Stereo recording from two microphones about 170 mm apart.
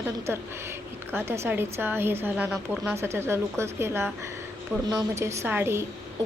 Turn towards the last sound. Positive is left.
turn(degrees=-15)  # may be behind; listen again after turning